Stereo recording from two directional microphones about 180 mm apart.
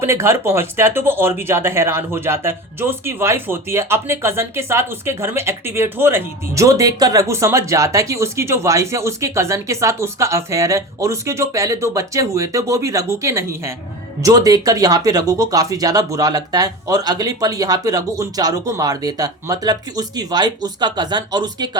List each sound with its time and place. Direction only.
0.0 s speech: 15° right (ahead or behind)